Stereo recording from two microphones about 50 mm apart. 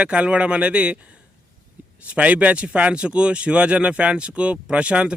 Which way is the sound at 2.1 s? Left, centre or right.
Right.